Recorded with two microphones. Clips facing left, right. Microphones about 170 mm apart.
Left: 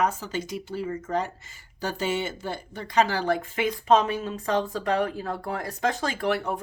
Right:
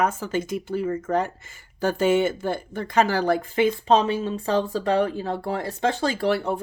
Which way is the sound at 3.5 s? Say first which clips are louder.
Right 2 dB; 30° right (ahead or behind).